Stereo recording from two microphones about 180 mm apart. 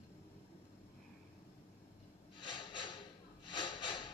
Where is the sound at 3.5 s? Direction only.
25° left (ahead or behind).